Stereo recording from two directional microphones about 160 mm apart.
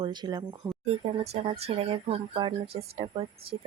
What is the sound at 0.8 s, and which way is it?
Speech, 40° right (ahead or behind).